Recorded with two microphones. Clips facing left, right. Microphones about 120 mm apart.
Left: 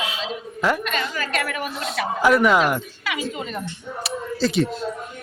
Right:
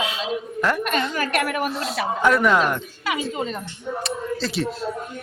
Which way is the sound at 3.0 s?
35° right (ahead or behind).